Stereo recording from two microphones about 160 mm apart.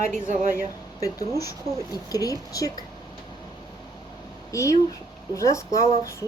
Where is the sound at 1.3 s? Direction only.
20° left (ahead or behind).